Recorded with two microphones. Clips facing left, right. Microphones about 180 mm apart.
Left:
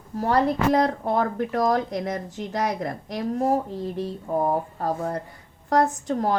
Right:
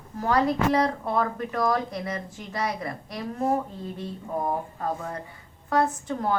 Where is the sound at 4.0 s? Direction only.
35° left (ahead or behind).